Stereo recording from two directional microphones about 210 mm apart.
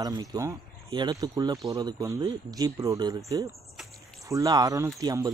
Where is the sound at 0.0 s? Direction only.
15° right (ahead or behind).